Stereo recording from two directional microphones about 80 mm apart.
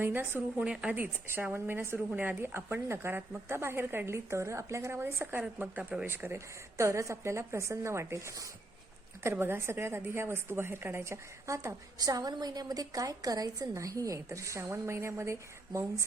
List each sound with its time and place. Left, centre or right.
0.0 s a woman's voice: right
0.6 s a woman's voice: centre
0.9 s a woman's voice: right
6.1 s a woman's voice: right
9.2 s a woman's voice: right
11.9 s a woman's voice: right